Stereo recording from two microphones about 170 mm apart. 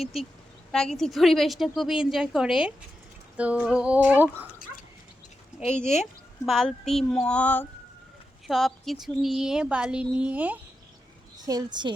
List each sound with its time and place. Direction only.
0.0 s speech: centre (ahead or behind)
3.3 s female singing: 10° right (ahead or behind)
6.4 s speech: centre (ahead or behind)
11.3 s a woman's voice: 20° right (ahead or behind)